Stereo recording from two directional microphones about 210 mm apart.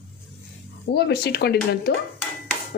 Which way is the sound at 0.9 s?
50° left (ahead or behind).